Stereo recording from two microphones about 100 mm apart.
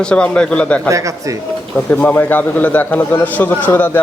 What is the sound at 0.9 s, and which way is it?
Speech, 30° right (ahead or behind).